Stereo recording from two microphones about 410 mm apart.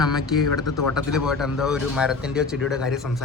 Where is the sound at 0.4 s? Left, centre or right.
Left.